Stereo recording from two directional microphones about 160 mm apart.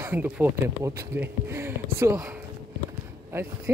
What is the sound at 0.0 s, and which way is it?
Speech, 10° right (ahead or behind).